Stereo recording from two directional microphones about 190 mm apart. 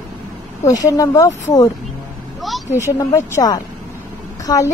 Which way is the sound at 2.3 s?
Centre (ahead or behind).